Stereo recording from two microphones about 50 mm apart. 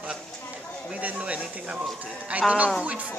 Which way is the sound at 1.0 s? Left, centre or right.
Right.